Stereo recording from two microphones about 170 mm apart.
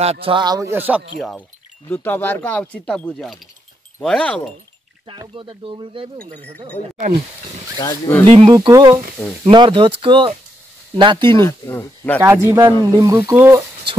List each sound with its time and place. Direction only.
0.0 s speech: 35° right (ahead or behind); by 1.0 s 10° right (ahead or behind)
1.9 s speech: 10° left (ahead or behind)
5.3 s speech: 30° right (ahead or behind)
7.8 s speech: 10° left (ahead or behind)
8.5 s speech: 20° right (ahead or behind)
11.3 s speech: 15° left (ahead or behind)
12.4 s speech: 15° right (ahead or behind)